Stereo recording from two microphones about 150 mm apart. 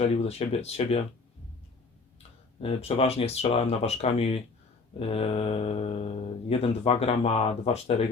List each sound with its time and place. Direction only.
0.3 s speech: 45° left (ahead or behind)
2.6 s speech: 40° left (ahead or behind)